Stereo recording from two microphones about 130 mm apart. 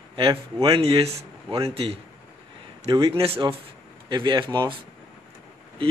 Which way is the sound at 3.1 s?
45° right (ahead or behind).